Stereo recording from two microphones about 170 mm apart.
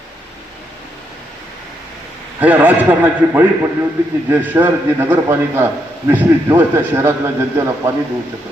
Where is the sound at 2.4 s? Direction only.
10° right (ahead or behind).